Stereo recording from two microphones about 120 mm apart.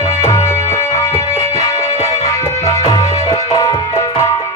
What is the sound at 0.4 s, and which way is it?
Music, 20° left (ahead or behind).